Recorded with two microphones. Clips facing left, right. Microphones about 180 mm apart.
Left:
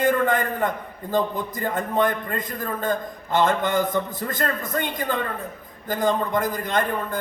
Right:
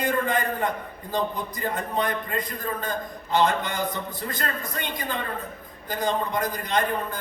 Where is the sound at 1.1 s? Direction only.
50° left (ahead or behind).